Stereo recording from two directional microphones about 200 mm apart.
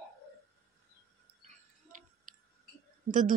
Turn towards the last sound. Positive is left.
turn(degrees=-40)  # may be behind; listen again after turning